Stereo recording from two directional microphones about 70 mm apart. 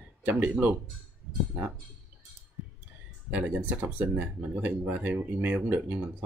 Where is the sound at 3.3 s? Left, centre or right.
Right.